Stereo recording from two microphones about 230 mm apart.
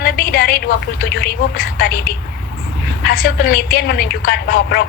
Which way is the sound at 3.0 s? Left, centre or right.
Left.